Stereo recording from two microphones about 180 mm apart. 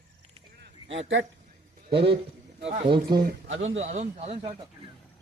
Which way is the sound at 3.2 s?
90° right.